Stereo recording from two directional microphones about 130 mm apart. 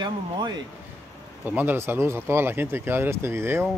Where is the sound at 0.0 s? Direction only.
35° right (ahead or behind).